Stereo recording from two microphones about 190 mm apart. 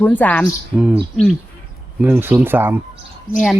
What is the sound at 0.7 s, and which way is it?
Speech, 5° right (ahead or behind).